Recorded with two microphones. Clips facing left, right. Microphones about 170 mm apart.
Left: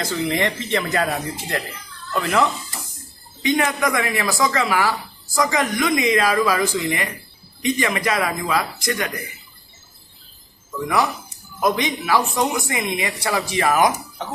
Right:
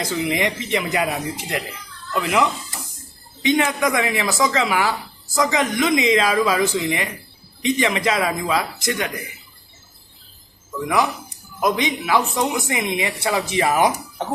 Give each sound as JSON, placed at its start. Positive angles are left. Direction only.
{"t": 0.0, "sound": "speech", "side_deg": -10}
{"t": 11.6, "sound": "speech", "side_deg": -20}